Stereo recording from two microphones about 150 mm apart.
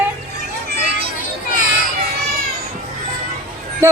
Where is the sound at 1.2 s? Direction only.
65° left (ahead or behind).